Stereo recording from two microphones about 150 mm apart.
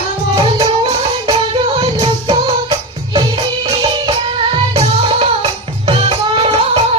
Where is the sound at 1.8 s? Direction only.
40° right (ahead or behind).